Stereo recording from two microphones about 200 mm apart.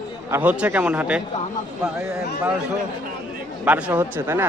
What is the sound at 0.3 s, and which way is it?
Speech, 10° right (ahead or behind).